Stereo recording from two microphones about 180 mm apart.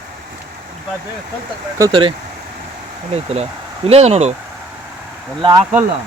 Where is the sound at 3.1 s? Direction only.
35° right (ahead or behind).